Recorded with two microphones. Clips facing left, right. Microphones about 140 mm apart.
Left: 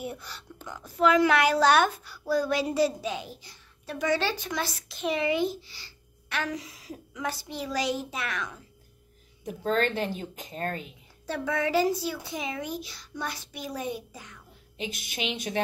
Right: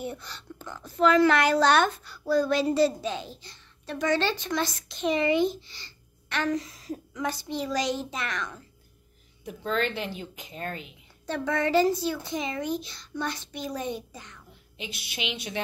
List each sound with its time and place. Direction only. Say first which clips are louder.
0.0 s a woman's voice: right 1 dB; 10° left (ahead or behind)
9.4 s speech: left 2 dB; 40° left (ahead or behind)
11.2 s a woman's voice: right 1 dB; 5° left (ahead or behind)
14.8 s a woman's voice: left 3 dB; 45° left (ahead or behind)